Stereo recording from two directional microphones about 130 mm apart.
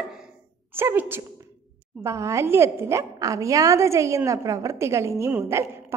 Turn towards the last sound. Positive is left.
turn(degrees=-20)  # may be behind; listen again after turning